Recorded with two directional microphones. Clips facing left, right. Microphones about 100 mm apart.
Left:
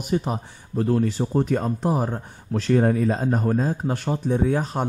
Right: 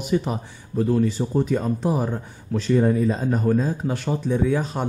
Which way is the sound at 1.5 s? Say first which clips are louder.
Even; 55° left (ahead or behind).